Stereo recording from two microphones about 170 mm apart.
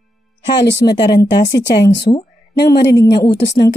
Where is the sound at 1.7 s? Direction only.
90° left.